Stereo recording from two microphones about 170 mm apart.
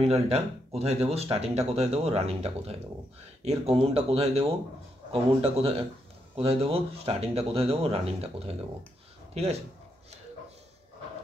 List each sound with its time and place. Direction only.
0.0 s speech: 35° right (ahead or behind)